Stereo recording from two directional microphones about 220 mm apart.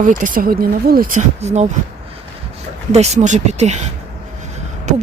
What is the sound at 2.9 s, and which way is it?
Speech, 30° right (ahead or behind).